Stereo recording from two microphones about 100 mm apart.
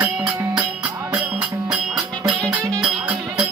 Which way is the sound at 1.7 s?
5° right (ahead or behind).